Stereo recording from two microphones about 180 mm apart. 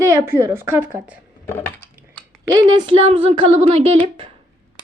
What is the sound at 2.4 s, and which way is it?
Speech, 20° right (ahead or behind).